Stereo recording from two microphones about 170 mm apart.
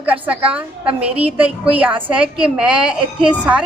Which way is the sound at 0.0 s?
10° right (ahead or behind).